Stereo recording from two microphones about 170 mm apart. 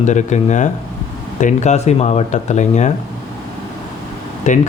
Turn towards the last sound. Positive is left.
turn(degrees=45)  # may be behind; listen again after turning